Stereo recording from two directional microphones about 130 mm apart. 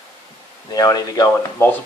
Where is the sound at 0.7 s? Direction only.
30° left (ahead or behind).